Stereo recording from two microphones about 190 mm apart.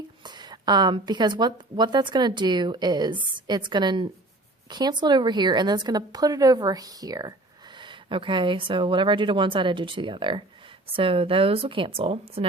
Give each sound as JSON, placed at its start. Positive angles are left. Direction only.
{"t": 0.2, "sound": "speech", "side_deg": -25}